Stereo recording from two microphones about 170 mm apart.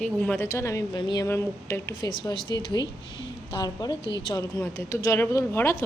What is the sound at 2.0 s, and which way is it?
A woman's voice, 25° left (ahead or behind).